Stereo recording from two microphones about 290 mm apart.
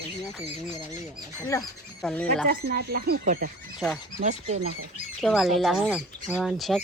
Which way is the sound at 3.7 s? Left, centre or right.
Centre.